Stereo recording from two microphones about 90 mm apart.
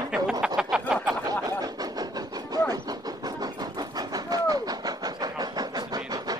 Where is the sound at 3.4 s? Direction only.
45° right (ahead or behind).